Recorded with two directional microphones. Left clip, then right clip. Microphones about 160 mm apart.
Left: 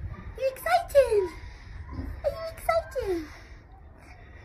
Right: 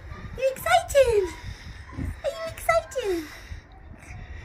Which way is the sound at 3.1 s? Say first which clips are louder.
Right 2 dB; 15° right (ahead or behind).